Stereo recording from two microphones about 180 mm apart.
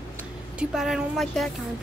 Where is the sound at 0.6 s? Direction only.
5° right (ahead or behind).